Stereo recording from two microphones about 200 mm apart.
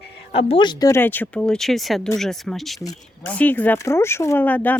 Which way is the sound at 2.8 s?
15° left (ahead or behind).